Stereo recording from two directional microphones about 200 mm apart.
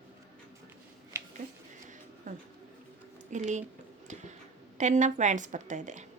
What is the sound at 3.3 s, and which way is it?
Speech, 35° right (ahead or behind).